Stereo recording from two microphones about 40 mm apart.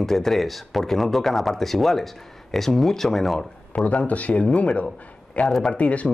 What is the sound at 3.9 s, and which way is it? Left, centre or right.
A man's voice, left.